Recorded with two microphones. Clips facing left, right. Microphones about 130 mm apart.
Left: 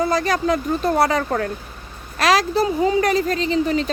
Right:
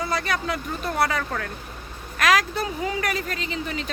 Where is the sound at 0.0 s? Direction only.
40° left (ahead or behind).